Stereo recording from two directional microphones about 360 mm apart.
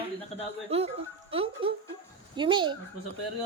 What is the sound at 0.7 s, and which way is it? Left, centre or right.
A woman's voice, centre.